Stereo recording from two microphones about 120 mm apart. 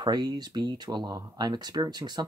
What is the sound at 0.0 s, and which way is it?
Speech, 35° right (ahead or behind).